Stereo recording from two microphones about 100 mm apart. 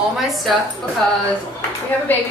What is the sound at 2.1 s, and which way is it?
Speech, 20° left (ahead or behind).